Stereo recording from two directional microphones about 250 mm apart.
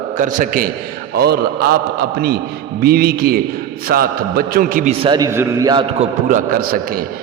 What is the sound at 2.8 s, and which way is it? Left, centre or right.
A man's voice, right.